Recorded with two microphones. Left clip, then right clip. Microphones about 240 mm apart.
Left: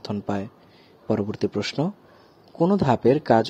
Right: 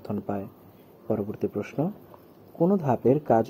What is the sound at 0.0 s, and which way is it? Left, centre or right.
A man's voice, left.